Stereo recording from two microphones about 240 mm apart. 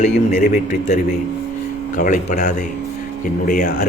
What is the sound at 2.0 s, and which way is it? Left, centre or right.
A man's voice, left.